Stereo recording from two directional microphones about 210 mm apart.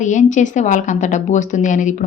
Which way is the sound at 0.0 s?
35° left (ahead or behind).